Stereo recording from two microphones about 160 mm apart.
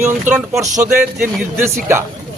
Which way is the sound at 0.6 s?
15° right (ahead or behind).